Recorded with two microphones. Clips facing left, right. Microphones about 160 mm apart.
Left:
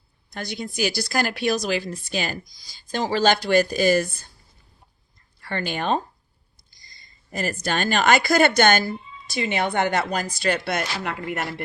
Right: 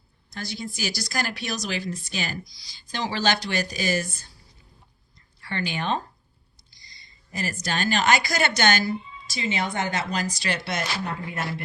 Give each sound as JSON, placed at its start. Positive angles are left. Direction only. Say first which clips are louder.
{"t": 0.3, "sound": "a woman's voice", "louder": "left 5 dB", "side_deg": 55}
{"t": 5.4, "sound": "a woman's voice", "louder": "left 2 dB", "side_deg": 50}